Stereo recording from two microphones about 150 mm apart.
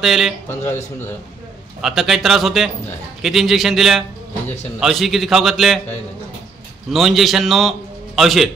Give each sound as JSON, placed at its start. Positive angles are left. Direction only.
{"t": 0.0, "sound": "a man's voice", "side_deg": 0}
{"t": 0.5, "sound": "a man's voice", "side_deg": 15}
{"t": 1.8, "sound": "a man's voice", "side_deg": 0}
{"t": 6.9, "sound": "a man's voice", "side_deg": 0}